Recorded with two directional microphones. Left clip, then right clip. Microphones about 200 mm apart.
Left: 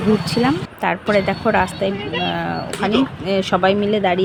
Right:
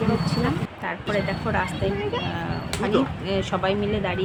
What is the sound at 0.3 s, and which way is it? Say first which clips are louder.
Speech: left 7 dB; 35° left (ahead or behind).